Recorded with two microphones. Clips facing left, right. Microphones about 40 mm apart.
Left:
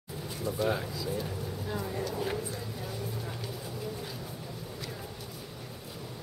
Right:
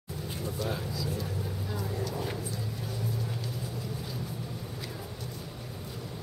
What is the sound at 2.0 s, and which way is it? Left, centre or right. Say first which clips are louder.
Speech: left 1 dB; centre.